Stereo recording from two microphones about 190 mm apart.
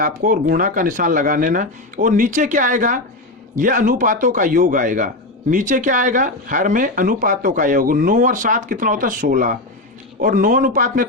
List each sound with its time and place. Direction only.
0.0 s speech: 45° right (ahead or behind)